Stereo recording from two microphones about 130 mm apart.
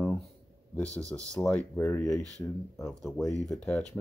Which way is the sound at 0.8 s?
25° right (ahead or behind).